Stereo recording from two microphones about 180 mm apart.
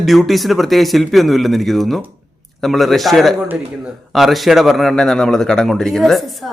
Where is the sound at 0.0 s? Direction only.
Centre (ahead or behind).